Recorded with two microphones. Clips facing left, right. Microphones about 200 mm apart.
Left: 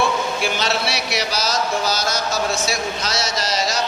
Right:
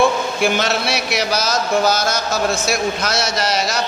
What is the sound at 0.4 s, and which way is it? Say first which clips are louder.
A man's voice: right 7 dB; 50° right (ahead or behind).